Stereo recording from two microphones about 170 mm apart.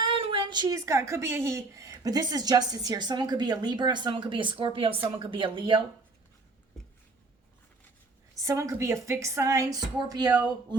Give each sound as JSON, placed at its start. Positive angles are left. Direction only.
{"t": 0.1, "sound": "a woman's voice", "side_deg": -30}
{"t": 8.4, "sound": "a woman's voice", "side_deg": -20}